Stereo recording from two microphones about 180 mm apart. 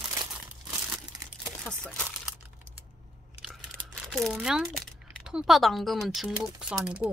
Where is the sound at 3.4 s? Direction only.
Centre (ahead or behind).